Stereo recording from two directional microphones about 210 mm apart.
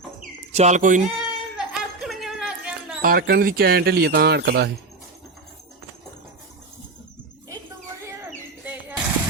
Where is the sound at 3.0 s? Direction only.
45° right (ahead or behind).